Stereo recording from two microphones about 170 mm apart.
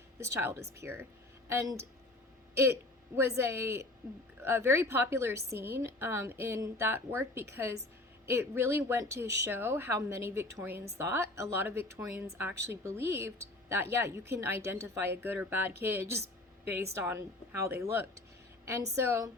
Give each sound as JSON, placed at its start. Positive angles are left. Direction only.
{"t": 0.2, "sound": "speech", "side_deg": -15}
{"t": 3.2, "sound": "speech", "side_deg": -15}